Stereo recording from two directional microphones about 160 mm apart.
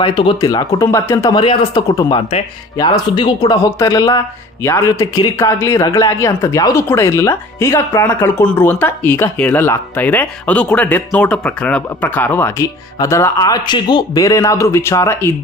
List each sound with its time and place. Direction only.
0.0 s speech: 30° left (ahead or behind)